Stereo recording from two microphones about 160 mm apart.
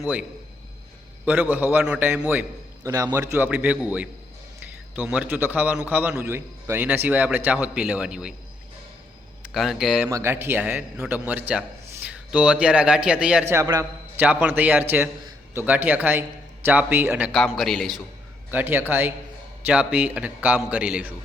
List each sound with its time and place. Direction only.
0.0 s a man's voice: 10° right (ahead or behind)
9.5 s a man's voice: centre (ahead or behind)
10.1 s a man's voice: 15° right (ahead or behind)
13.5 s a man's voice: 20° right (ahead or behind); by 18.0 s centre (ahead or behind)
18.5 s a man's voice: 15° right (ahead or behind)